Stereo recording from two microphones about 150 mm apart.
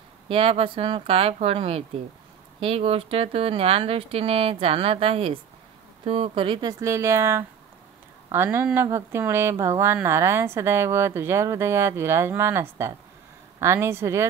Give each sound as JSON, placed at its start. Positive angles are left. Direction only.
{"t": 0.3, "sound": "speech", "side_deg": -40}